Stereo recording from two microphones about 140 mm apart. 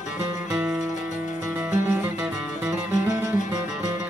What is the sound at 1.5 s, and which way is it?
Music, 15° right (ahead or behind).